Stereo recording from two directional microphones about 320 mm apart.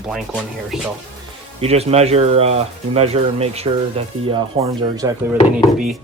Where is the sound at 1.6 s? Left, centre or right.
Centre.